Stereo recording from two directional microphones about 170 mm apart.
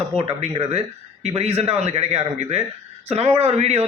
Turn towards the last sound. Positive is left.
turn(degrees=-40)  # may be behind; listen again after turning